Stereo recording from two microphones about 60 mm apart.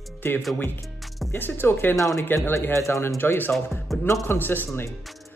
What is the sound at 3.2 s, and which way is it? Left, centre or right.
Speech, left.